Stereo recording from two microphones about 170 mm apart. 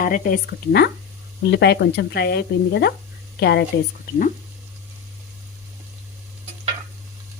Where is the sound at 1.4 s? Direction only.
85° left; by 3.7 s 70° left (ahead or behind).